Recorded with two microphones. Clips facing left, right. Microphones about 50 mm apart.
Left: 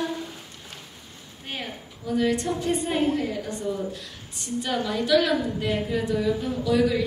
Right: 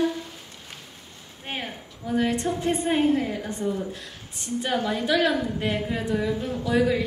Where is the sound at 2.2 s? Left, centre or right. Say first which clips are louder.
Even; right.